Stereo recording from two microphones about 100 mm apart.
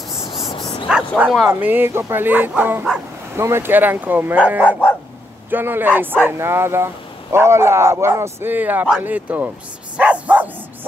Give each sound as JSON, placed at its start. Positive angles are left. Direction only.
{"t": 0.1, "sound": "dog", "side_deg": 0}
{"t": 0.8, "sound": "speech", "side_deg": -10}
{"t": 1.5, "sound": "speech", "side_deg": -20}
{"t": 9.9, "sound": "dog", "side_deg": -15}